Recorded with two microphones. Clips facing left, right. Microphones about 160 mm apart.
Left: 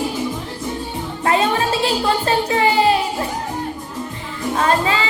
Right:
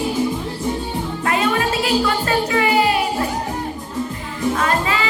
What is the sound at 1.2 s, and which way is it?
Music, 30° left (ahead or behind).